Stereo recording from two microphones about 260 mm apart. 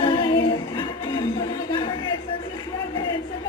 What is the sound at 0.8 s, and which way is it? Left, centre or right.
Music, centre.